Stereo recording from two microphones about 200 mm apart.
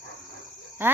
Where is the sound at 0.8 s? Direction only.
10° right (ahead or behind).